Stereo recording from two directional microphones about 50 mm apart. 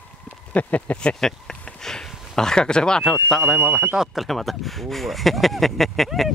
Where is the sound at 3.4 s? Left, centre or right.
Right.